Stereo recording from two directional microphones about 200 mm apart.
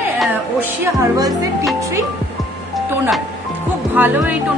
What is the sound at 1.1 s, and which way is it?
Speech, 20° right (ahead or behind).